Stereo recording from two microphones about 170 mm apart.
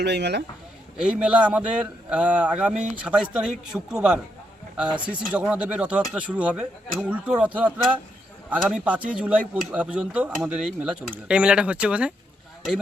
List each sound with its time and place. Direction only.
0.0 s speech: 80° right
0.9 s a man's voice: 5° right (ahead or behind)